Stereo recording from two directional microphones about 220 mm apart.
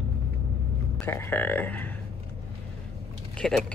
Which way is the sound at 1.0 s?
10° left (ahead or behind).